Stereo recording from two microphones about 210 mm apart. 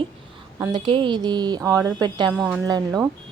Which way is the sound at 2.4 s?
5° right (ahead or behind).